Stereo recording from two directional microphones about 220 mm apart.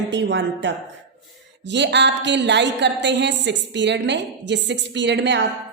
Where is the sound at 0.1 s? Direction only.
55° right (ahead or behind).